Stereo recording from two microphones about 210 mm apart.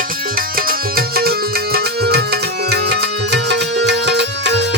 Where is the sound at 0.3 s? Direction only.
45° right (ahead or behind).